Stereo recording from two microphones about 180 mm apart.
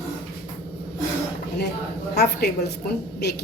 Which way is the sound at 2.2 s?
65° left (ahead or behind).